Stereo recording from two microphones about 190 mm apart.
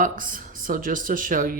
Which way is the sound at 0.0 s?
45° right (ahead or behind).